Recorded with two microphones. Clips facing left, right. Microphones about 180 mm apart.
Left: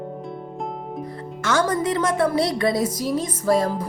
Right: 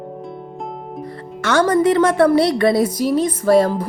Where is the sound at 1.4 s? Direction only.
65° right (ahead or behind).